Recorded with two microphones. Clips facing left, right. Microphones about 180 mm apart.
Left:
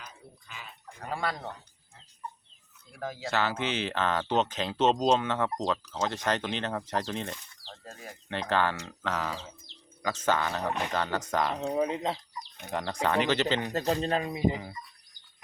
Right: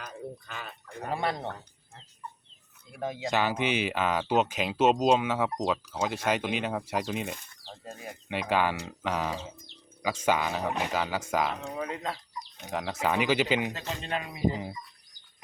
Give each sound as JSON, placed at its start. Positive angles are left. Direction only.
{"t": 0.0, "sound": "a sound", "side_deg": -65}
{"t": 1.1, "sound": "speech", "side_deg": -25}
{"t": 2.9, "sound": "speech", "side_deg": -20}
{"t": 11.6, "sound": "speech", "side_deg": 25}
{"t": 12.6, "sound": "speech", "side_deg": -5}
{"t": 13.7, "sound": "speech", "side_deg": 40}